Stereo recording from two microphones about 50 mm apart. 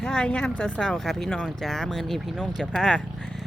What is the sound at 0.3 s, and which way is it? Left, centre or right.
Speech, left.